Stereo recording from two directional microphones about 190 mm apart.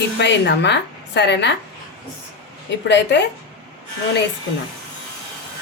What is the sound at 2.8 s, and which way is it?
Speech, 65° left (ahead or behind).